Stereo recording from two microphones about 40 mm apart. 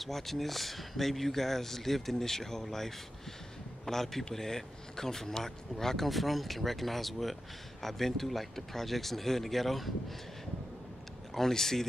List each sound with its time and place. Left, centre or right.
0.0 s speech: centre
11.3 s speech: centre